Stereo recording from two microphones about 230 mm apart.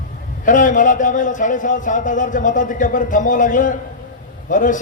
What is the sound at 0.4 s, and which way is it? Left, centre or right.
A man's voice, left.